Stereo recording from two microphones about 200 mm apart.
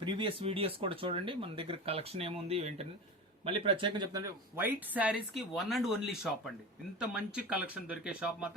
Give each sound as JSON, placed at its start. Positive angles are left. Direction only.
{"t": 0.0, "sound": "speech", "side_deg": -25}